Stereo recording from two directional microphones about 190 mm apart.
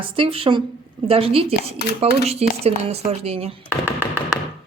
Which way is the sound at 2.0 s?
30° right (ahead or behind).